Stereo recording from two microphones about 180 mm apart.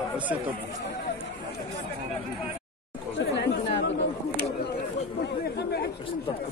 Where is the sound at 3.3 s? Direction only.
75° left (ahead or behind).